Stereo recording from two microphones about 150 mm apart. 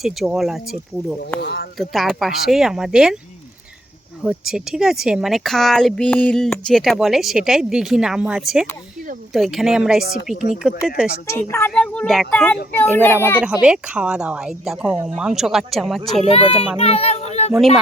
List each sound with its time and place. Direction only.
0.0 s speech: centre (ahead or behind)
1.8 s speech: centre (ahead or behind)
4.2 s speech: 5° right (ahead or behind)
11.3 s a child's voice: 15° left (ahead or behind)
13.4 s speech: 5° right (ahead or behind)
16.2 s a child's voice: 45° left (ahead or behind)